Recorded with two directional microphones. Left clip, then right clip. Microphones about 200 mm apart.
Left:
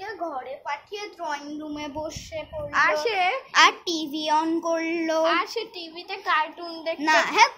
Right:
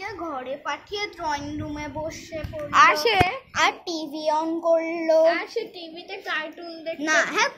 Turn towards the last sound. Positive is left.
turn(degrees=20)  # may be behind; listen again after turning